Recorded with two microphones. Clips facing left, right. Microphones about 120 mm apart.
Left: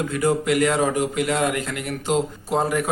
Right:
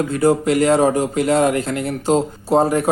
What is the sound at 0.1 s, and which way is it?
A man's voice, 35° right (ahead or behind).